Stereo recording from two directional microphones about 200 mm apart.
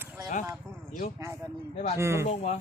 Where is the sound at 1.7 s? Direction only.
30° left (ahead or behind).